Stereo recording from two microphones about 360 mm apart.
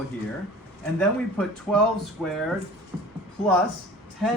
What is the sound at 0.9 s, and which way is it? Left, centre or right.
Speech, centre.